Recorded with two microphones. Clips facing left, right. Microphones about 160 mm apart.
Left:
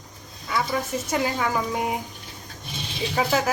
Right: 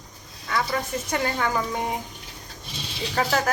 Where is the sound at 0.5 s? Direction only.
5° left (ahead or behind).